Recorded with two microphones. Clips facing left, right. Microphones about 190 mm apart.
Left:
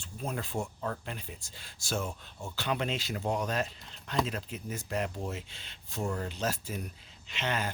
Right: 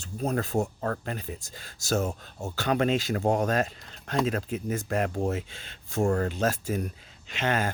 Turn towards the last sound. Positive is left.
turn(degrees=-50)  # may be behind; listen again after turning